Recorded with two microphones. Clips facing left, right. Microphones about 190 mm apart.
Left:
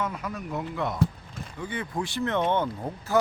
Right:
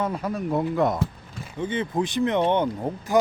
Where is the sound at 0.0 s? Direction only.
35° right (ahead or behind).